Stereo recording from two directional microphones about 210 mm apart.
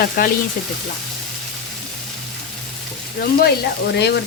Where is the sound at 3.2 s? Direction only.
50° left (ahead or behind).